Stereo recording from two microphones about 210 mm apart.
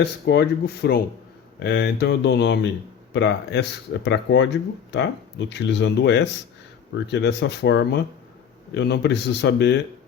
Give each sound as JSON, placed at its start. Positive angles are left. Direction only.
{"t": 0.0, "sound": "a man's voice", "side_deg": 55}